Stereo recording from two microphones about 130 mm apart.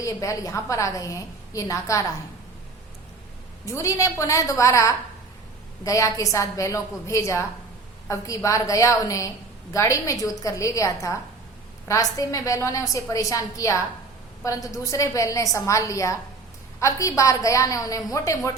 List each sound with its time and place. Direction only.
0.0 s a woman's voice: 25° left (ahead or behind)
3.7 s a woman's voice: 25° left (ahead or behind)